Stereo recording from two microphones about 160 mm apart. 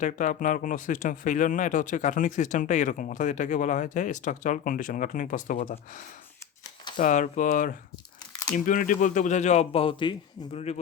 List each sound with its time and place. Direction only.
0.0 s speech: 50° left (ahead or behind)
6.9 s speech: 55° left (ahead or behind); by 10.6 s 35° left (ahead or behind)